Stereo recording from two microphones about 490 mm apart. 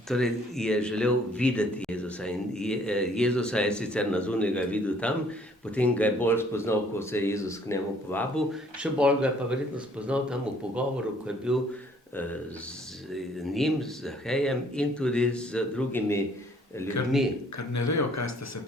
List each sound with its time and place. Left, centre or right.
0.1 s a man's voice: centre
12.1 s a man's voice: centre
17.7 s speech: left